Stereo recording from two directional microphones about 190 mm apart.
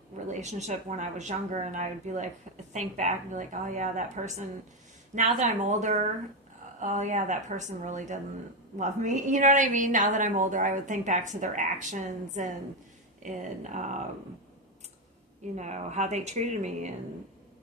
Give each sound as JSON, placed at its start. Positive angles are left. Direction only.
{"t": 0.3, "sound": "a woman's voice", "side_deg": -35}
{"t": 15.5, "sound": "a woman's voice", "side_deg": -40}